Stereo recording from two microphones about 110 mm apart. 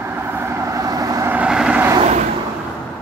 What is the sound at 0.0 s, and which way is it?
Vehicle, 20° right (ahead or behind).